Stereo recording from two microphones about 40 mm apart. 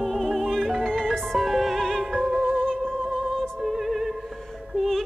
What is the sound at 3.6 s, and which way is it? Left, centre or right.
Music, centre.